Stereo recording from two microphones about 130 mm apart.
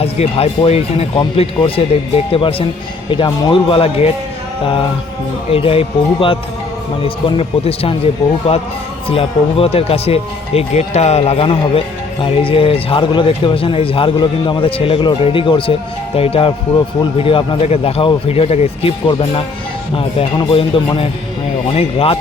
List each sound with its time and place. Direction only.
0.0 s speech: 50° left (ahead or behind)